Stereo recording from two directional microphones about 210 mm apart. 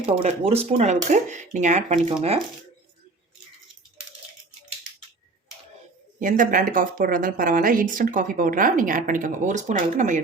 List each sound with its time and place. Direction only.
0.0 s speech: 30° right (ahead or behind)
6.1 s speech: 40° right (ahead or behind)